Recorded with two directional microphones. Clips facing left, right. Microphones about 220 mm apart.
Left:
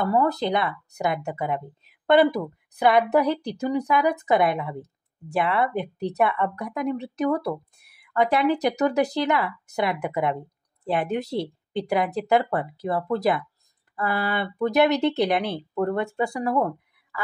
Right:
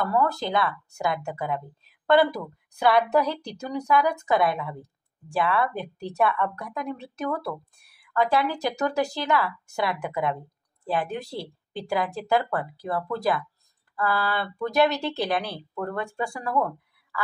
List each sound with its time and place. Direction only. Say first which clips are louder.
0.0 s speech: left 3 dB; 20° left (ahead or behind)